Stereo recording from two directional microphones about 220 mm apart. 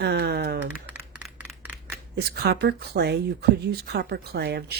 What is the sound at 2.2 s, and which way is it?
Speech, 45° right (ahead or behind).